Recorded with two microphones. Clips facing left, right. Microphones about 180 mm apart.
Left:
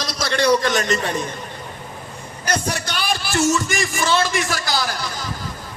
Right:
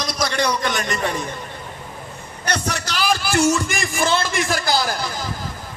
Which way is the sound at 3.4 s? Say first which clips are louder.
Even; 55° right (ahead or behind).